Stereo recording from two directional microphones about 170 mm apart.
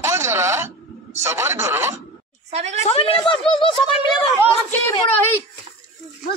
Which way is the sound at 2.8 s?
35° left (ahead or behind).